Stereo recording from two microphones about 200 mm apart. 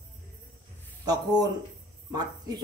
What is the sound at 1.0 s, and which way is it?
A woman's voice, 20° right (ahead or behind).